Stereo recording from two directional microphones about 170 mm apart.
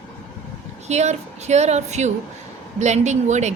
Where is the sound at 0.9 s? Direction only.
40° right (ahead or behind).